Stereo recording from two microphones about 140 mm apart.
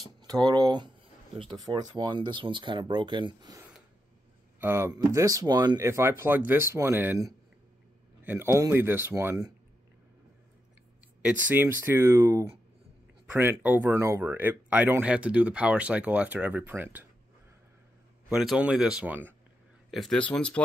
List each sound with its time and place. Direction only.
0.2 s speech: 30° right (ahead or behind)
4.6 s speech: 15° right (ahead or behind)
8.2 s speech: 15° right (ahead or behind)
11.2 s speech: 15° right (ahead or behind)
18.3 s speech: centre (ahead or behind)
19.9 s speech: centre (ahead or behind)